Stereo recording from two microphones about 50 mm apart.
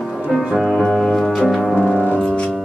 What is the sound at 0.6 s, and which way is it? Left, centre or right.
Music, centre.